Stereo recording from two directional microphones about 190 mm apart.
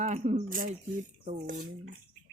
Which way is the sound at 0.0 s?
40° right (ahead or behind).